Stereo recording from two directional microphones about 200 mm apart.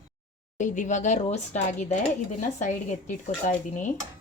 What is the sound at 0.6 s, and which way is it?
Speech, 40° left (ahead or behind).